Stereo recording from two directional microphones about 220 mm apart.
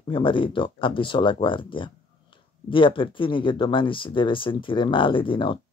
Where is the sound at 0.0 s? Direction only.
25° left (ahead or behind).